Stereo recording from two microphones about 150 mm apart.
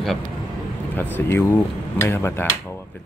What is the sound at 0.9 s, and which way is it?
Speech, 10° left (ahead or behind).